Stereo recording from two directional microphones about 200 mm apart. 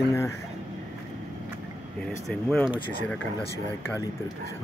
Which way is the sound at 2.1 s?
5° left (ahead or behind).